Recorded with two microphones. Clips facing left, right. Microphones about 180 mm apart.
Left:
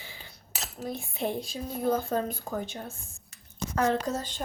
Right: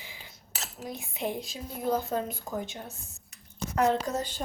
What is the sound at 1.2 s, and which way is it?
Speech, 15° right (ahead or behind).